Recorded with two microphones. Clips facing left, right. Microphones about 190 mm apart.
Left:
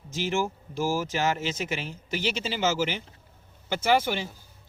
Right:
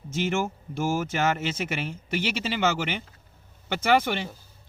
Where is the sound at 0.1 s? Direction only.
55° right (ahead or behind).